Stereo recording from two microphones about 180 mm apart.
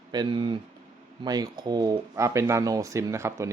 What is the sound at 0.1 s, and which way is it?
Speech, 25° right (ahead or behind).